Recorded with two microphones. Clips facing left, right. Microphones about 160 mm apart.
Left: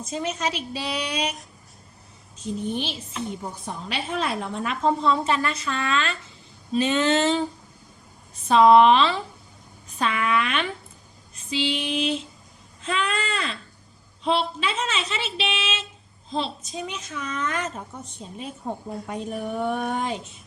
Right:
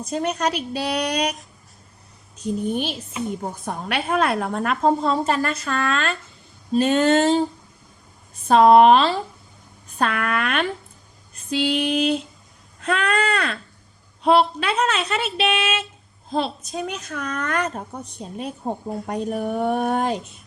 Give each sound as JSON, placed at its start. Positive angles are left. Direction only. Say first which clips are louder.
{"t": 0.0, "sound": "a woman's voice", "louder": "right 4 dB", "side_deg": -60}
{"t": 2.4, "sound": "a woman's voice", "louder": "right 4 dB", "side_deg": -50}
{"t": 3.1, "sound": "speech", "louder": "right 4 dB", "side_deg": 0}
{"t": 3.4, "sound": "a woman's voice", "louder": "right 5 dB", "side_deg": -50}
{"t": 8.4, "sound": "a woman's voice", "louder": "right 2 dB", "side_deg": -50}
{"t": 17.7, "sound": "a woman's voice", "louder": "right 4 dB", "side_deg": -40}
{"t": 18.6, "sound": "a woman's voice", "louder": "right 3 dB", "side_deg": -25}
{"t": 19.3, "sound": "a woman's voice", "louder": "right 4 dB", "side_deg": -50}
{"t": 20.1, "sound": "speech", "louder": "right 4 dB", "side_deg": 0}